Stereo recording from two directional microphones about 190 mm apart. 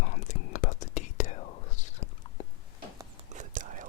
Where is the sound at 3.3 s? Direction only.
40° right (ahead or behind).